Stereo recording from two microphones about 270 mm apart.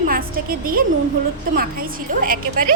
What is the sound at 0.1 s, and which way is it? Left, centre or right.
Speech, right.